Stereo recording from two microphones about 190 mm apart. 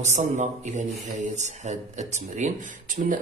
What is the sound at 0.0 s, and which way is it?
Speech, 40° right (ahead or behind).